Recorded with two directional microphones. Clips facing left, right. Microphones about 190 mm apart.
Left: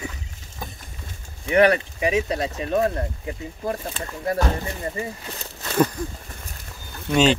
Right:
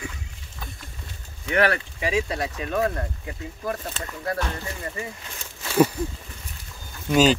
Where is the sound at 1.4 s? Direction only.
20° left (ahead or behind).